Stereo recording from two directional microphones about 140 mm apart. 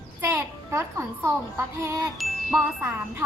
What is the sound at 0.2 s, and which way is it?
A child's voice, 15° right (ahead or behind).